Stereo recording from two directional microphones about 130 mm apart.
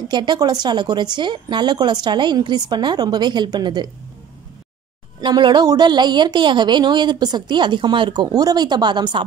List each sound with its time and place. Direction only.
0.1 s a woman's voice: 35° right (ahead or behind)
5.2 s a woman's voice: 35° right (ahead or behind)